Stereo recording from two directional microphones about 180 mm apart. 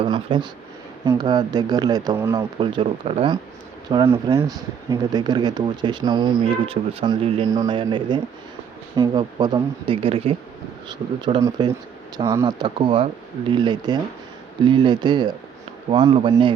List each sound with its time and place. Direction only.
0.0 s speech: 30° right (ahead or behind)
11.4 s speech: 25° right (ahead or behind)